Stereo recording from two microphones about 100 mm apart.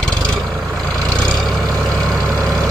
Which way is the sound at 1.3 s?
Centre (ahead or behind).